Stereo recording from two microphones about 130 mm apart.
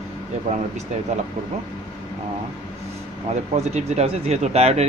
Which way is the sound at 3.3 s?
60° right (ahead or behind).